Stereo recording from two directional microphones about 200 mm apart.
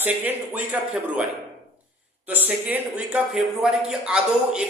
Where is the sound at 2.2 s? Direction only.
10° right (ahead or behind).